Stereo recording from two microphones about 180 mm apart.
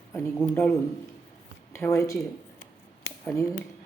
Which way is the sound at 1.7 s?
15° left (ahead or behind).